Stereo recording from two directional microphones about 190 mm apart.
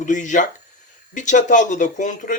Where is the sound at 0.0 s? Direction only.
40° left (ahead or behind).